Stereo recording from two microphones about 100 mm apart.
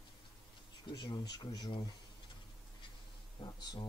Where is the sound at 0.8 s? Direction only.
45° left (ahead or behind).